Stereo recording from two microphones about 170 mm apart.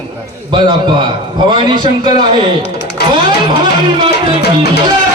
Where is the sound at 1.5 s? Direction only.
25° right (ahead or behind).